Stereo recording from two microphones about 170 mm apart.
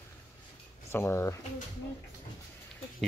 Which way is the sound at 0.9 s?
15° left (ahead or behind).